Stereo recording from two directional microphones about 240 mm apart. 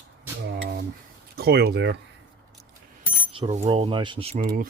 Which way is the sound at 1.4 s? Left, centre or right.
Right.